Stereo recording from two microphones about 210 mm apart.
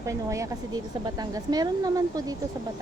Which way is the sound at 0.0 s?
15° right (ahead or behind).